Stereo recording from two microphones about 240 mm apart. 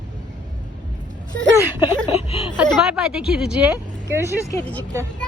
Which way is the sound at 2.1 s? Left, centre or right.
Left.